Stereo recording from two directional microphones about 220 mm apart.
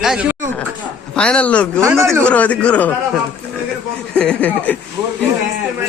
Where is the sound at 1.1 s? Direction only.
5° left (ahead or behind).